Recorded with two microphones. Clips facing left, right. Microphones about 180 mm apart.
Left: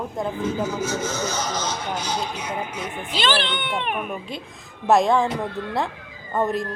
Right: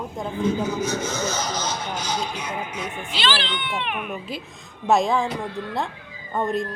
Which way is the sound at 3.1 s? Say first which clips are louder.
Left 3 dB; 50° left (ahead or behind).